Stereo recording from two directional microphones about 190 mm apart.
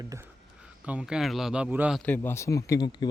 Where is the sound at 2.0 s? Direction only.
10° left (ahead or behind).